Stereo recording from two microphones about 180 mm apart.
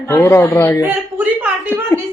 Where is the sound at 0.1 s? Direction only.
15° left (ahead or behind).